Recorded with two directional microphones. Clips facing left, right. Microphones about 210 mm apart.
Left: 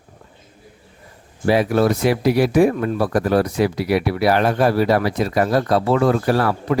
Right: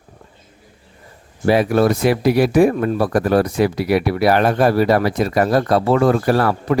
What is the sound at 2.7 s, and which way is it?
Speech, 45° right (ahead or behind).